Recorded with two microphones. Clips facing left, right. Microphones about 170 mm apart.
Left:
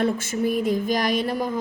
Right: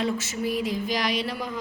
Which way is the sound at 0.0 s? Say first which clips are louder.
Left 4 dB; 50° left (ahead or behind).